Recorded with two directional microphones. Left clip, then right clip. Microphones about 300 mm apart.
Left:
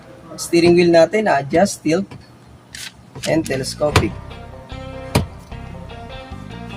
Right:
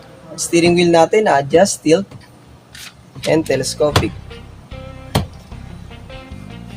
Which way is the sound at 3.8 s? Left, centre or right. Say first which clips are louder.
Right 2 dB; right.